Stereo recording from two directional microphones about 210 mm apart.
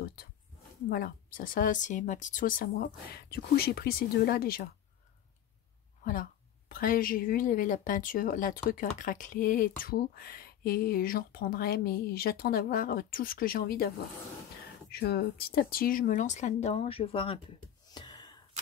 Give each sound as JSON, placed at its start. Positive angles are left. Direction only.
{"t": 0.8, "sound": "speech", "side_deg": 45}
{"t": 6.7, "sound": "speech", "side_deg": 40}
{"t": 17.8, "sound": "a sound", "side_deg": 20}